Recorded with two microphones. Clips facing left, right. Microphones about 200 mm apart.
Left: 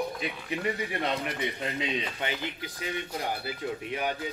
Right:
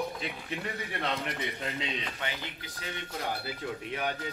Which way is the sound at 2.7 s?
15° left (ahead or behind).